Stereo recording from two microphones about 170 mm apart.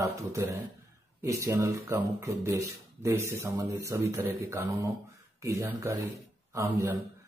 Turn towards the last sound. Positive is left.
turn(degrees=-15)  # may be behind; listen again after turning